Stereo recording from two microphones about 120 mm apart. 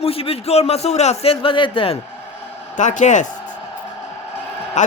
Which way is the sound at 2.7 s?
90° left.